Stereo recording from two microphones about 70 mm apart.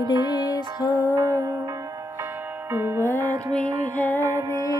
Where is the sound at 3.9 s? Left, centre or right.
Left.